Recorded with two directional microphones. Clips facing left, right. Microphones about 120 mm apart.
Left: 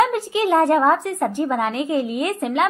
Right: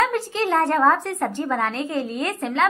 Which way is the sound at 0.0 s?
15° left (ahead or behind).